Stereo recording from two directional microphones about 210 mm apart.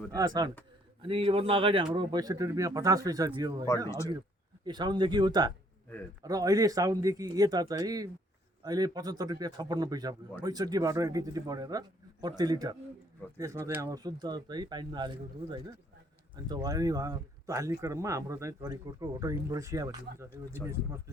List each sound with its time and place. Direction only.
0.1 s speech: 15° right (ahead or behind)
3.8 s speech: 15° left (ahead or behind)
4.6 s speech: 20° right (ahead or behind)